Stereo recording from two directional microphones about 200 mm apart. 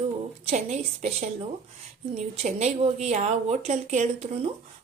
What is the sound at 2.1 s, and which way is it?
Speech, 30° right (ahead or behind).